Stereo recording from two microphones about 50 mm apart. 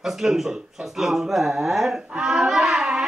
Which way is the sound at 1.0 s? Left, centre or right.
Centre.